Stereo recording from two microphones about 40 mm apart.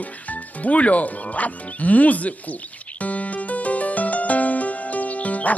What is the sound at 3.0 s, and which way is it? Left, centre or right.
Music, left.